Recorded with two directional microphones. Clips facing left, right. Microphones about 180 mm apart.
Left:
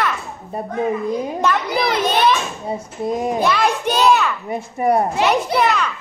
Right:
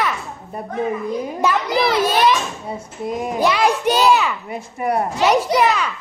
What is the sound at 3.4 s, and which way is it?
Speech, 10° right (ahead or behind).